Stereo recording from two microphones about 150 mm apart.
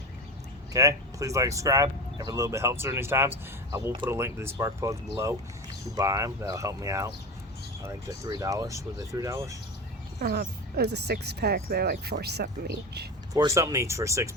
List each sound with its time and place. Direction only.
0.7 s speech: 20° right (ahead or behind)
10.2 s speech: 90° right
13.3 s speech: 20° right (ahead or behind)